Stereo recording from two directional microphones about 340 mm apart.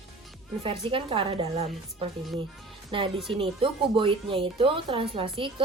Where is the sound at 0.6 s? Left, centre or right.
Centre.